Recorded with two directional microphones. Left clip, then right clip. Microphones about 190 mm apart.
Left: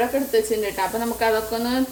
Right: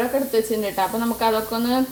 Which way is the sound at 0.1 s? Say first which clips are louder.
Even; 25° right (ahead or behind).